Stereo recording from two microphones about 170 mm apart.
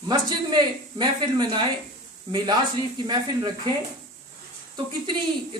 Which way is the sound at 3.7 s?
25° right (ahead or behind).